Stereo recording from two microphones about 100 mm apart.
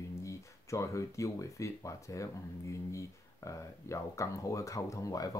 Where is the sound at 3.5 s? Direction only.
30° left (ahead or behind).